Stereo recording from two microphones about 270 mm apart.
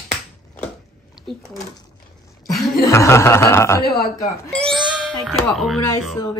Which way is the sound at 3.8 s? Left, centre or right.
Left.